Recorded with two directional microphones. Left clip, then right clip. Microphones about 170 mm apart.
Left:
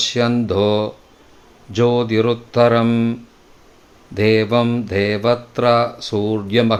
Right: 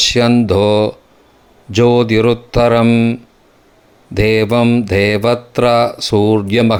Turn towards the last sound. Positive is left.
turn(degrees=-40)  # may be behind; listen again after turning